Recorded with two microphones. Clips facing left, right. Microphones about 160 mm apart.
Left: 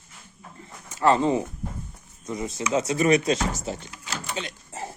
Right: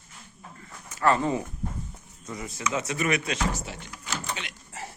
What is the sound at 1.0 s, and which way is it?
A man's voice, 20° left (ahead or behind).